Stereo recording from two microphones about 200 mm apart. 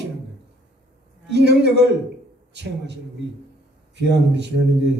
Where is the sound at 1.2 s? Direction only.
60° right (ahead or behind).